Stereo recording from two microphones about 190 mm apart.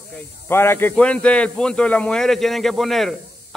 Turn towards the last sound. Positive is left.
turn(degrees=0)  # may be behind; listen again after turning